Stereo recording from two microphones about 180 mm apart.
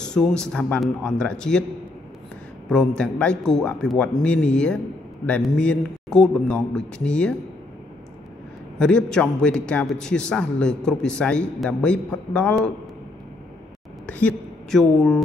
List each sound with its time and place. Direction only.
0.0 s a man's voice: 5° left (ahead or behind)
2.7 s a man's voice: 5° left (ahead or behind)
8.7 s a man's voice: 5° left (ahead or behind)
14.0 s speech: 5° left (ahead or behind)